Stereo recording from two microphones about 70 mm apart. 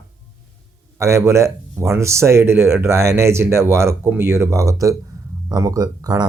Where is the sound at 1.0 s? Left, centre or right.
Right.